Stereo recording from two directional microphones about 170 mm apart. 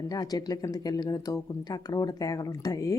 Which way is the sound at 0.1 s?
20° left (ahead or behind).